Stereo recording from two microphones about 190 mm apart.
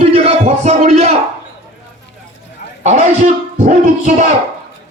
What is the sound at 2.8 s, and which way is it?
Speech, 40° right (ahead or behind).